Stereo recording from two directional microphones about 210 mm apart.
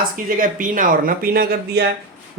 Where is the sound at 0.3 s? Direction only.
40° right (ahead or behind).